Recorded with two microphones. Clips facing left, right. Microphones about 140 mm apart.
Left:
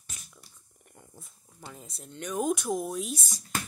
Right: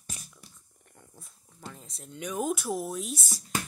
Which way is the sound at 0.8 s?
10° left (ahead or behind).